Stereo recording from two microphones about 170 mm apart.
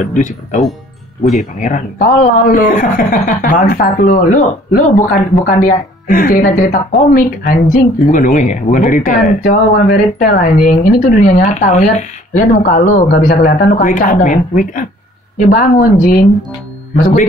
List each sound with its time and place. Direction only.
0.1 s speech: 45° left (ahead or behind)